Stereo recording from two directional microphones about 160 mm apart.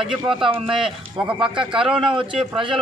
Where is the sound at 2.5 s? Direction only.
30° right (ahead or behind).